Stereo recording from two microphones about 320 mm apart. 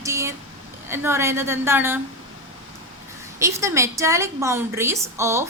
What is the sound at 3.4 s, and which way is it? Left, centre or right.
A woman's voice, centre.